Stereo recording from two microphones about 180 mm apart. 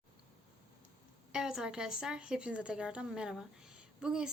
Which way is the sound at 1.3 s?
5° right (ahead or behind).